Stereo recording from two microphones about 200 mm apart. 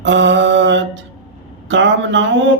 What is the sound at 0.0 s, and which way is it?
Mantra, 60° right (ahead or behind).